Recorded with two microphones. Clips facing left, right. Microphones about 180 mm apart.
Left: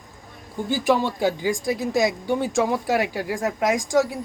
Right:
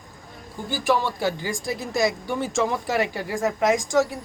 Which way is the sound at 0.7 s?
20° left (ahead or behind).